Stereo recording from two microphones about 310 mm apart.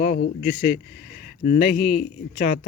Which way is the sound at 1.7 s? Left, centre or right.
Left.